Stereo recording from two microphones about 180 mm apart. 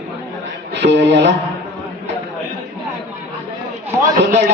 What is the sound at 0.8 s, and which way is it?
Speech, 75° right (ahead or behind).